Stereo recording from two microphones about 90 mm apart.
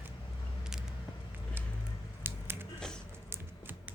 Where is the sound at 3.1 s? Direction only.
25° right (ahead or behind).